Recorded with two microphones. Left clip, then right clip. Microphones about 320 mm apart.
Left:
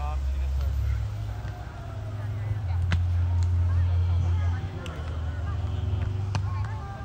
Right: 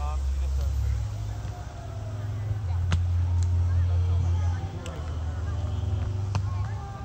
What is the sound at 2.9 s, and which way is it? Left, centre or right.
Vehicle, left.